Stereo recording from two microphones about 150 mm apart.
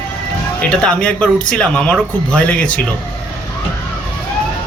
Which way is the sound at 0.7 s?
5° left (ahead or behind).